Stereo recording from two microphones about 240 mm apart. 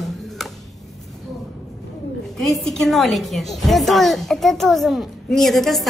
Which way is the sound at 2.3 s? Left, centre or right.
Centre.